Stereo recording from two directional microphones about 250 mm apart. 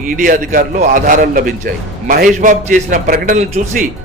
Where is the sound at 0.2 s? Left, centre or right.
Right.